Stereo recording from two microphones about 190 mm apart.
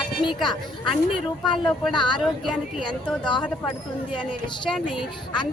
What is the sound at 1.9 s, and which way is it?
Speech, 25° left (ahead or behind).